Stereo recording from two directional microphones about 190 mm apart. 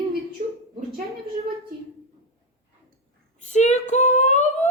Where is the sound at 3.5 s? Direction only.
35° left (ahead or behind).